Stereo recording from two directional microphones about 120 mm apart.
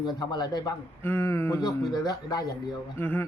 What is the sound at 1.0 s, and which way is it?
Speech, 20° left (ahead or behind).